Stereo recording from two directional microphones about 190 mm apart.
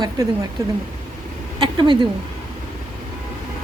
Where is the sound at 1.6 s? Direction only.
25° right (ahead or behind).